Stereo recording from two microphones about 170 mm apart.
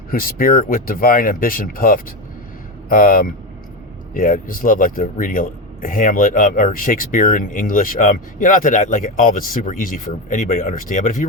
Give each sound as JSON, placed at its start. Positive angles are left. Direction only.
{"t": 0.1, "sound": "speech", "side_deg": 60}